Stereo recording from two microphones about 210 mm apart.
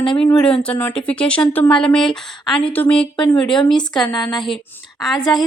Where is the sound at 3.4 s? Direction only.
20° left (ahead or behind).